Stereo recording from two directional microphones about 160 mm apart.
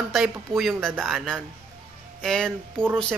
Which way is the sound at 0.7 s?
10° right (ahead or behind).